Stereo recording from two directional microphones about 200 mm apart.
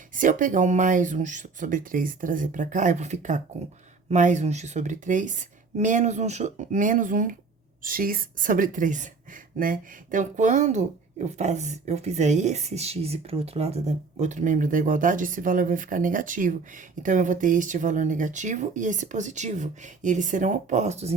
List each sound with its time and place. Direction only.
0.1 s speech: 40° right (ahead or behind)